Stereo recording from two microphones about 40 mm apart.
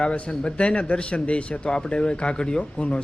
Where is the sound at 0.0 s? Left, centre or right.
Left.